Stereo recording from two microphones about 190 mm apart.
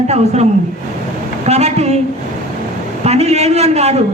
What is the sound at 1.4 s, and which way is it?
Speech, 35° right (ahead or behind).